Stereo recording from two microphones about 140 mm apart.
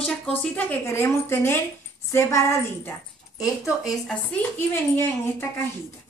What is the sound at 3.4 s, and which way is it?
Speech, centre (ahead or behind).